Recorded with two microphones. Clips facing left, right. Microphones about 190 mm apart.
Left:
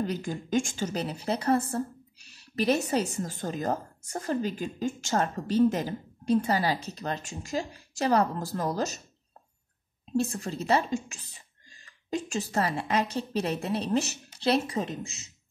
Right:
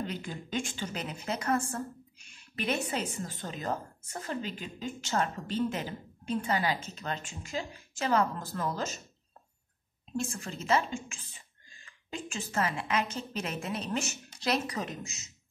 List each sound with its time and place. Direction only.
0.0 s a woman's voice: 40° left (ahead or behind)
10.1 s a woman's voice: 35° left (ahead or behind)